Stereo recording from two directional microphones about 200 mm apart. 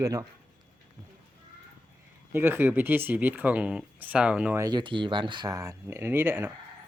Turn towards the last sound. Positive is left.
turn(degrees=-10)  # may be behind; listen again after turning